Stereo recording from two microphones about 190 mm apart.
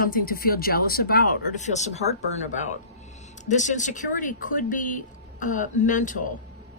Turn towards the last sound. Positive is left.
turn(degrees=40)  # may be behind; listen again after turning